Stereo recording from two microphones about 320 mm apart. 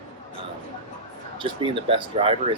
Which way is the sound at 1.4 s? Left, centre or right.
Centre.